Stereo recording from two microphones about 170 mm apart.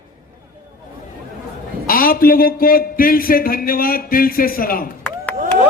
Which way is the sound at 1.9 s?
55° left (ahead or behind).